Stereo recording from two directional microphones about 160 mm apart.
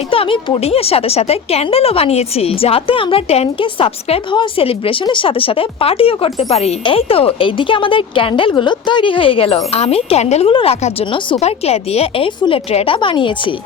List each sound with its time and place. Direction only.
0.1 s a woman's voice: 35° left (ahead or behind)